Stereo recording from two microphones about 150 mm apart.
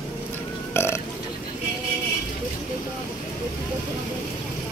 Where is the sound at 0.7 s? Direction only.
15° left (ahead or behind).